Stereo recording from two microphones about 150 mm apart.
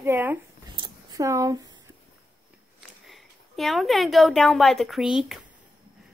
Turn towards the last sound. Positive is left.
turn(degrees=-5)  # may be behind; listen again after turning